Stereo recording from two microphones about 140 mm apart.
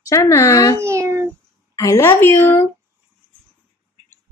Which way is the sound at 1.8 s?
20° left (ahead or behind).